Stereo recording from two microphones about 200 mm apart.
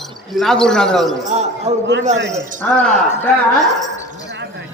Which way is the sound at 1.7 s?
30° right (ahead or behind).